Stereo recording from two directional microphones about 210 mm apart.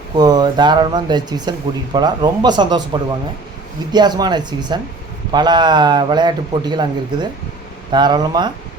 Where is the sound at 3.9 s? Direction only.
20° right (ahead or behind).